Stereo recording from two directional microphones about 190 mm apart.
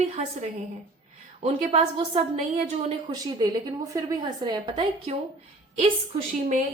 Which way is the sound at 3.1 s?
20° right (ahead or behind).